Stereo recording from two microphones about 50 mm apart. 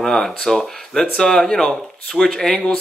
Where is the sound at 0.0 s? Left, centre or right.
Centre.